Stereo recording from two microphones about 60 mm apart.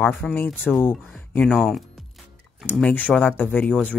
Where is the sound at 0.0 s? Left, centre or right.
Left.